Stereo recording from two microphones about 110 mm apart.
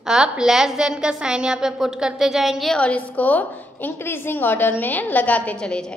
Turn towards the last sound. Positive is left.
turn(degrees=10)  # may be behind; listen again after turning